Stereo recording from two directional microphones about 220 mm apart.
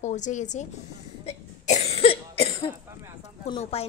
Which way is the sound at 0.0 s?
35° left (ahead or behind).